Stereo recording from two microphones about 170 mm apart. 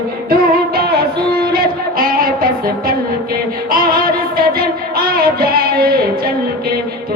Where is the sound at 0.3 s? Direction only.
60° right (ahead or behind).